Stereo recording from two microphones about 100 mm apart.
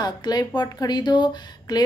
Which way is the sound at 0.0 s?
45° left (ahead or behind).